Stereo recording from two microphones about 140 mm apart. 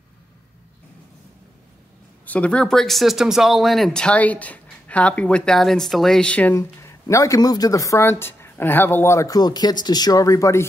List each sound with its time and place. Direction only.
2.2 s speech: 10° left (ahead or behind)
6.5 s speech: 20° left (ahead or behind)